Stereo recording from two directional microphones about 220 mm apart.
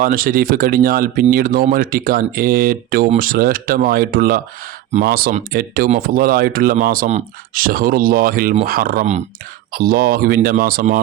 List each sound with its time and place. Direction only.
0.0 s speech: 40° right (ahead or behind)